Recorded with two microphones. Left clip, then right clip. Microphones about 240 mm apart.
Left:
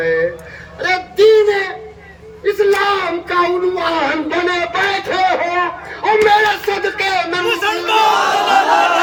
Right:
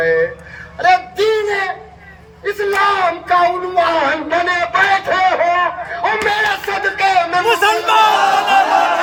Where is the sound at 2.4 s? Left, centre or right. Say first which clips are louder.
Left 1 dB; centre.